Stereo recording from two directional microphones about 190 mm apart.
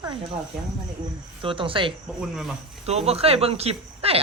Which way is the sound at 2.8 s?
35° right (ahead or behind).